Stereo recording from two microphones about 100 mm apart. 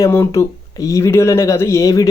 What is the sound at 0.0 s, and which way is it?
Speech, 30° left (ahead or behind).